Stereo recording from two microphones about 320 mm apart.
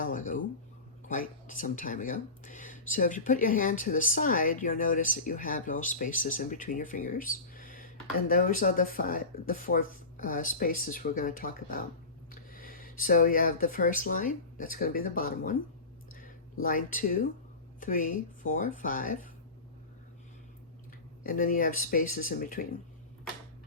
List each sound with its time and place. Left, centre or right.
0.0 s speech: left
16.6 s speech: left
21.2 s speech: left